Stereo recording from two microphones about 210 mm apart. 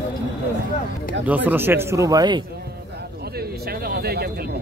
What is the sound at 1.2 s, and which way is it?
Speech, 10° right (ahead or behind).